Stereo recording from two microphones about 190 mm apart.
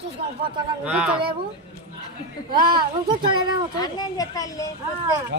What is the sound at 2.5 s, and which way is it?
Speech, 25° right (ahead or behind).